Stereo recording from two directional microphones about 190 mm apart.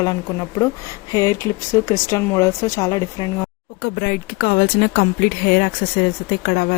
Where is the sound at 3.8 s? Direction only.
55° left (ahead or behind).